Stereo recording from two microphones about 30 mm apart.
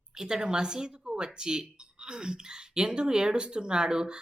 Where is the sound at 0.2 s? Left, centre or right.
Right.